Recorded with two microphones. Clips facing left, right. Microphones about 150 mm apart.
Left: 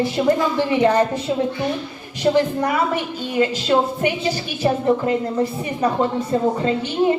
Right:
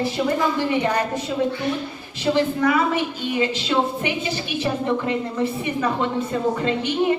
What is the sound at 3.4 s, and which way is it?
Speech, 45° left (ahead or behind).